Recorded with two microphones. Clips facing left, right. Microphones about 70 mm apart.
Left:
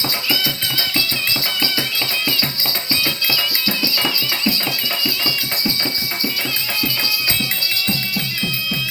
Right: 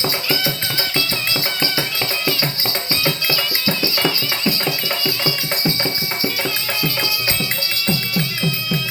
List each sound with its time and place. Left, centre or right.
0.9 s music: right
2.9 s music: right
7.9 s music: right